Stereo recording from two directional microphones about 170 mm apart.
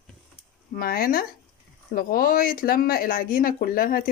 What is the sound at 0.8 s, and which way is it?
Speech, 60° left (ahead or behind).